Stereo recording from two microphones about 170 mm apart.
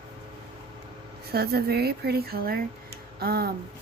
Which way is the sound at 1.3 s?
65° right (ahead or behind).